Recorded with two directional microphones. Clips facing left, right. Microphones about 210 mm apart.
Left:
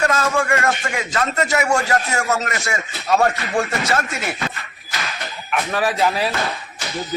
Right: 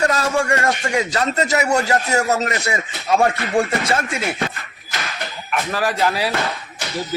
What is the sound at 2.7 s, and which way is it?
Speech, 15° right (ahead or behind).